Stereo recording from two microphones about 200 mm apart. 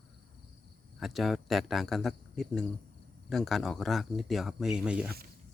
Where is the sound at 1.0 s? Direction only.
Centre (ahead or behind).